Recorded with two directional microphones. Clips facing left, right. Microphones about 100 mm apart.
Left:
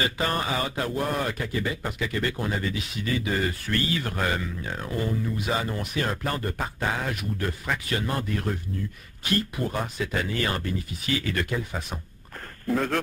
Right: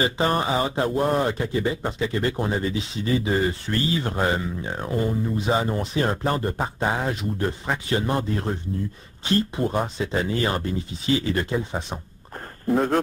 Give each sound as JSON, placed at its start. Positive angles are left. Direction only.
{"t": 0.0, "sound": "a man's voice", "side_deg": -25}